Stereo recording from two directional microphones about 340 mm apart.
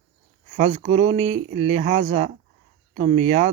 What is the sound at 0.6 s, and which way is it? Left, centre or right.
Speech, right.